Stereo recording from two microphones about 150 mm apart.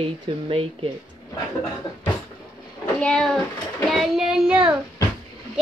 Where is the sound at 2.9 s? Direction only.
5° left (ahead or behind).